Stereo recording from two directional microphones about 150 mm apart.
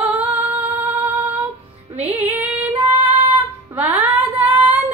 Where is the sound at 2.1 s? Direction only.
10° right (ahead or behind).